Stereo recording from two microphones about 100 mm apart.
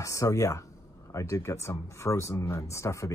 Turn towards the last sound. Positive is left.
turn(degrees=30)  # may be behind; listen again after turning